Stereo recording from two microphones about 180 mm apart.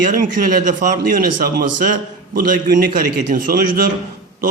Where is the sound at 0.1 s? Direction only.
50° right (ahead or behind).